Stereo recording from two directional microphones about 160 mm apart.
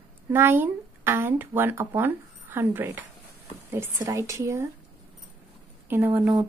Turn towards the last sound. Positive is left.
turn(degrees=-10)  # may be behind; listen again after turning